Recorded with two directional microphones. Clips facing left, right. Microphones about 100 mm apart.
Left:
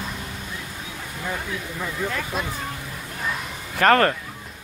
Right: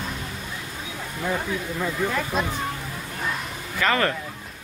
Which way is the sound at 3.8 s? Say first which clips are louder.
Left 6 dB; 55° left (ahead or behind).